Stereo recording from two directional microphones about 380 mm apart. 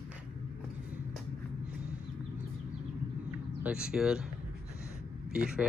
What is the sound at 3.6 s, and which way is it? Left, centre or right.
Speech, centre.